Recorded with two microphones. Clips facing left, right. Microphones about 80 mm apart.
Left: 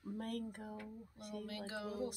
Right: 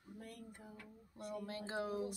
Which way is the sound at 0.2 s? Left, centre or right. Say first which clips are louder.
Left 9 dB; left.